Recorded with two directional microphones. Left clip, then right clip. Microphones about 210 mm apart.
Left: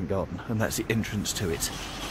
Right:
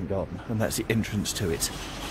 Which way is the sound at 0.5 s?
5° right (ahead or behind).